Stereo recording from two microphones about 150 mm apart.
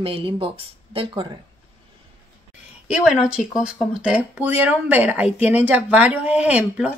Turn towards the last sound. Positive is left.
turn(degrees=-10)  # may be behind; listen again after turning